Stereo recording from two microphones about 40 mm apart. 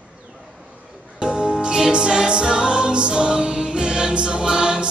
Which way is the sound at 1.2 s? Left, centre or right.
Right.